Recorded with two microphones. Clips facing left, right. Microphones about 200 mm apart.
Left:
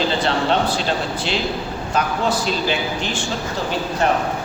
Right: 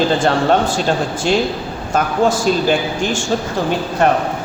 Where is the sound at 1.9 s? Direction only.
45° right (ahead or behind).